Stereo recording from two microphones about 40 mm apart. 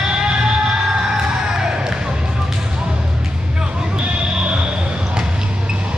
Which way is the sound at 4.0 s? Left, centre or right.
Right.